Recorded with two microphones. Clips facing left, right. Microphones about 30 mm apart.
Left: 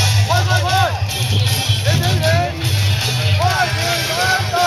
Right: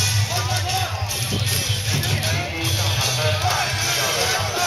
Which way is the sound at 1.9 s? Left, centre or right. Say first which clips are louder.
Left 7 dB; left.